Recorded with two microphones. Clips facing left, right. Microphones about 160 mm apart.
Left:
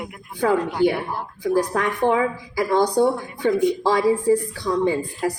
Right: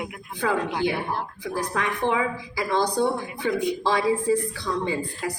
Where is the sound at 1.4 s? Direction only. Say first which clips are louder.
Left 10 dB; 50° left (ahead or behind).